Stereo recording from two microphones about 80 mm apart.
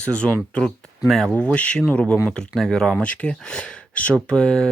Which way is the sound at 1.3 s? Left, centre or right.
Centre.